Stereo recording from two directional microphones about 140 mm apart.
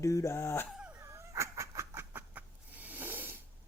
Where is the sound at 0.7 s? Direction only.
10° right (ahead or behind).